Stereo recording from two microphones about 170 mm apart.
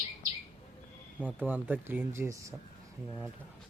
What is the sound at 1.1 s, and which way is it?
Speech, 10° right (ahead or behind).